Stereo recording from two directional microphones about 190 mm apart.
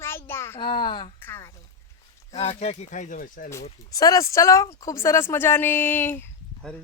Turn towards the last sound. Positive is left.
turn(degrees=10)  # may be behind; listen again after turning